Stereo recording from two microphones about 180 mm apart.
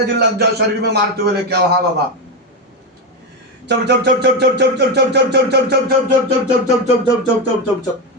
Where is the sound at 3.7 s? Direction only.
65° right (ahead or behind).